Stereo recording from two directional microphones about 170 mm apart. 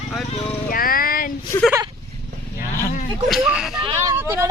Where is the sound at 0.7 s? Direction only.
60° left (ahead or behind).